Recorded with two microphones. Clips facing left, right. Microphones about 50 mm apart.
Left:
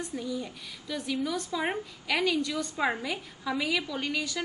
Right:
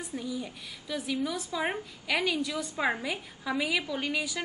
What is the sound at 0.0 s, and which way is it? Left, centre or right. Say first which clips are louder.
A woman's voice: left 1 dB; centre.